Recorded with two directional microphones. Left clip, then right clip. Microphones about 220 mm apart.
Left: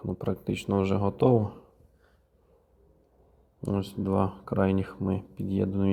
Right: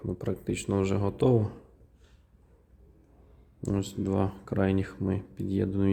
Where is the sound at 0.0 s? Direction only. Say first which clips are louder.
Left 1 dB; 5° left (ahead or behind).